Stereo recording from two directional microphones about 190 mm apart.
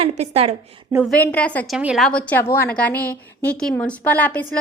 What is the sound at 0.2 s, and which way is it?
Speech, 30° right (ahead or behind).